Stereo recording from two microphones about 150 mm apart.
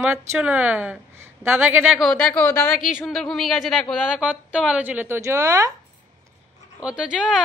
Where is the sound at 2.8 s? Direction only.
Centre (ahead or behind).